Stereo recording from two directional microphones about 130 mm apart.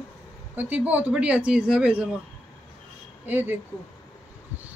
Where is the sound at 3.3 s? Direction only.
15° right (ahead or behind).